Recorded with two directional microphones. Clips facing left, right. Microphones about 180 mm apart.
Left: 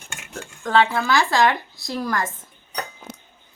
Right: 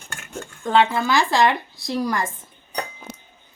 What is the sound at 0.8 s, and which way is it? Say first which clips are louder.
Speech: right 1 dB; centre (ahead or behind).